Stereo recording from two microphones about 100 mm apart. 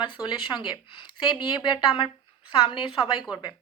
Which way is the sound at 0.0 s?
55° left (ahead or behind).